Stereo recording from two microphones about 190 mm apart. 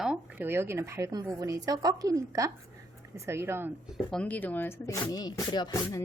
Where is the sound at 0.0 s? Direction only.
5° right (ahead or behind).